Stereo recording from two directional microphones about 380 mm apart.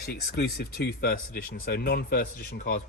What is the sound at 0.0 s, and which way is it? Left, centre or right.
Speech, left.